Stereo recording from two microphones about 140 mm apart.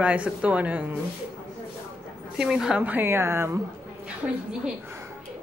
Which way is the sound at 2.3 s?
5° right (ahead or behind).